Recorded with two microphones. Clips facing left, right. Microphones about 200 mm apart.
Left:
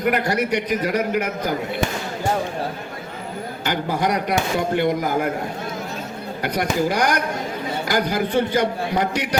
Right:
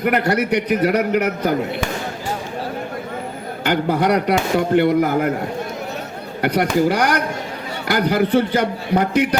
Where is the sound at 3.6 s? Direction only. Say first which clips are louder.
Right 5 dB; 60° right (ahead or behind).